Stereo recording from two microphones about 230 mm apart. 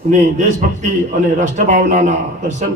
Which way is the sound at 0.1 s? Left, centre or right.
Right.